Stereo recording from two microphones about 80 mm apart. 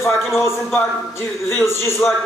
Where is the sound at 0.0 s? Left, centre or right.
Left.